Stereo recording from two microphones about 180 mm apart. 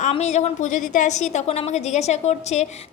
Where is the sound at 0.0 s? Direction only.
40° left (ahead or behind).